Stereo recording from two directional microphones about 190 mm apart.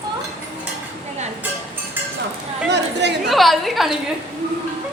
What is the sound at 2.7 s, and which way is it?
Chatter, 65° right (ahead or behind).